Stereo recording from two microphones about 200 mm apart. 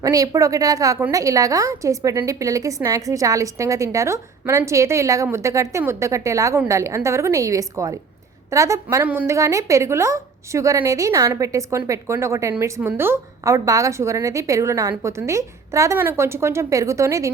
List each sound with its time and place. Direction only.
0.0 s a woman's voice: 15° right (ahead or behind)